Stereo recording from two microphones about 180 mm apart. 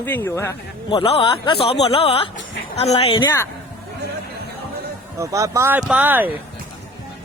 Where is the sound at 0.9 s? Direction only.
30° left (ahead or behind).